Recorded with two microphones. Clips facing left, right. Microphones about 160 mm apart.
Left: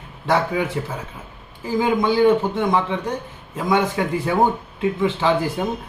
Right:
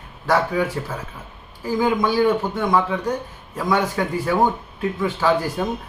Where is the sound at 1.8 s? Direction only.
20° left (ahead or behind).